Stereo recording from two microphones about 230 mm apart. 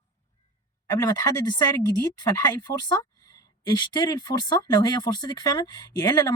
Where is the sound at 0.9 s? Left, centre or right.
Centre.